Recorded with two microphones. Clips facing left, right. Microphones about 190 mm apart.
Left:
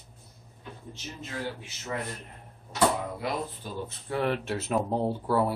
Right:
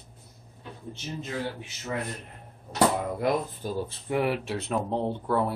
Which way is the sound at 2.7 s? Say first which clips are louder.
Right 2 dB; 45° right (ahead or behind).